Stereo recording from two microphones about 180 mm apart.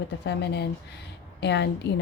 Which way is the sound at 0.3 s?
65° left (ahead or behind).